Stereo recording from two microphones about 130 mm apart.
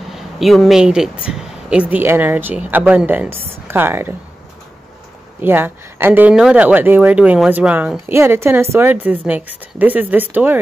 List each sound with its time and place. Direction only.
0.1 s speech: centre (ahead or behind)
5.4 s a woman's voice: 15° right (ahead or behind)